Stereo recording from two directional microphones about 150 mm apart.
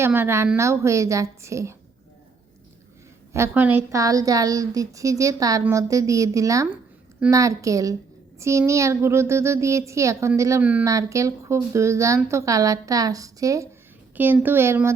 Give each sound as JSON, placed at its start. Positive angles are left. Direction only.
{"t": 0.0, "sound": "speech", "side_deg": -15}
{"t": 3.3, "sound": "speech", "side_deg": -15}
{"t": 10.6, "sound": "speech", "side_deg": -10}
{"t": 10.8, "sound": "speech", "side_deg": -20}